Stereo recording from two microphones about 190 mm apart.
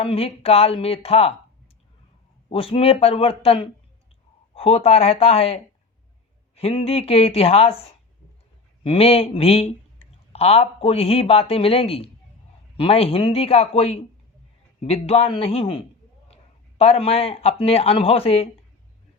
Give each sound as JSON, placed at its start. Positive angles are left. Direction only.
{"t": 0.0, "sound": "speech", "side_deg": 30}
{"t": 2.5, "sound": "speech", "side_deg": 30}
{"t": 6.6, "sound": "a man's voice", "side_deg": 30}